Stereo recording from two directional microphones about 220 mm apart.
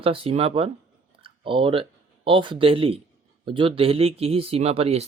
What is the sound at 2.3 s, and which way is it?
Speech, 20° right (ahead or behind).